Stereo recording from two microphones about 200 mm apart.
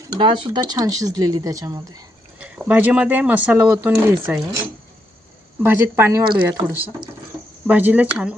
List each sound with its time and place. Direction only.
0.1 s speech: 25° right (ahead or behind)
2.4 s speech: 5° right (ahead or behind)
5.6 s speech: 10° right (ahead or behind)